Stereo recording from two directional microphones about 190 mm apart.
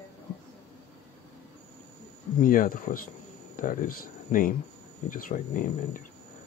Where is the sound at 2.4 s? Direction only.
45° left (ahead or behind).